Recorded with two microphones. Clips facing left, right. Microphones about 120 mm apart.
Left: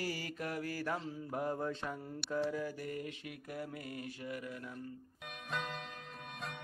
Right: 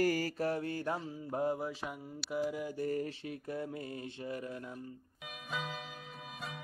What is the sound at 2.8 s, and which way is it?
Mantra, 35° right (ahead or behind).